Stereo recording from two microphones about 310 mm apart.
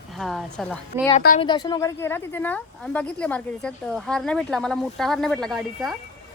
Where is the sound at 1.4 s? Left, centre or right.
Centre.